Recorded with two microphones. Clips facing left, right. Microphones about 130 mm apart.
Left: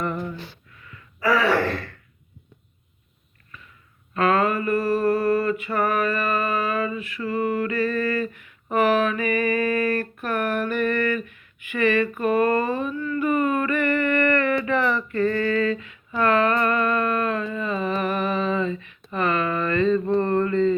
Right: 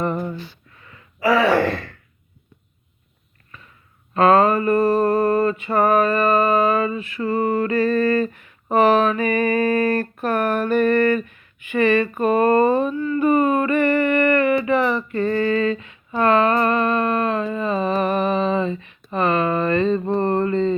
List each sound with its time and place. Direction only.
0.0 s a sound: 35° right (ahead or behind)
1.2 s gasp: 25° right (ahead or behind)
4.1 s mantra: 30° right (ahead or behind)
17.4 s humming: 30° right (ahead or behind)
20.1 s mantra: 30° right (ahead or behind)